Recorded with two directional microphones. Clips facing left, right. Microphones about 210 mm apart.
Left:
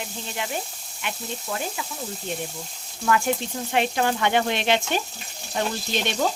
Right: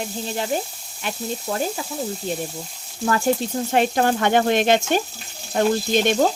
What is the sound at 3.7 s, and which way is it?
Frying, 45° right (ahead or behind).